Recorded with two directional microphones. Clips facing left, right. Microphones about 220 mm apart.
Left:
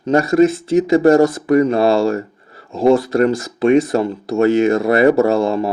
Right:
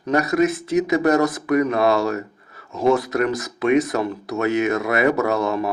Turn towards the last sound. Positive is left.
turn(degrees=30)  # may be behind; listen again after turning